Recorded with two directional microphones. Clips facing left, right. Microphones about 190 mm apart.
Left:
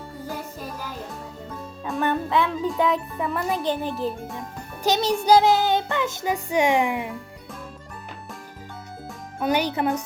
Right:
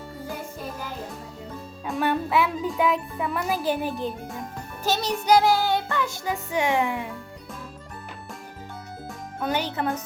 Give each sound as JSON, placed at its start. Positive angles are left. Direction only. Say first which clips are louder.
{"t": 1.8, "sound": "a child's voice", "louder": "even", "side_deg": -10}
{"t": 5.0, "sound": "music", "louder": "left 2 dB", "side_deg": 30}
{"t": 9.4, "sound": "speech", "louder": "left 4 dB", "side_deg": 15}